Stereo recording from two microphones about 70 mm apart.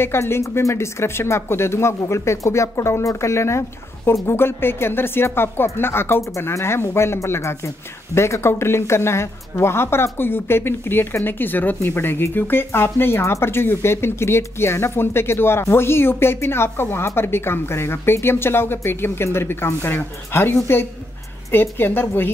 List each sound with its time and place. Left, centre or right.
0.0 s speech: left